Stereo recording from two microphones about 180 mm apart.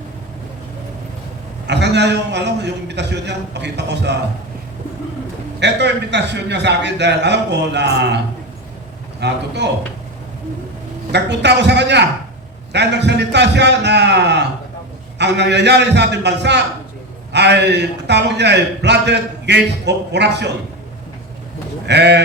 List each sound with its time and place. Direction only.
1.6 s a man's voice: 70° right (ahead or behind)
5.5 s a man's voice: 70° right (ahead or behind)
9.2 s a man's voice: 70° right (ahead or behind)
11.1 s a man's voice: 70° right (ahead or behind)
21.8 s a man's voice: 70° right (ahead or behind)